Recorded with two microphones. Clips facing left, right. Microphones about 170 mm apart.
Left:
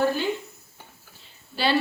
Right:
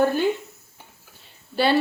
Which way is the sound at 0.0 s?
50° right (ahead or behind).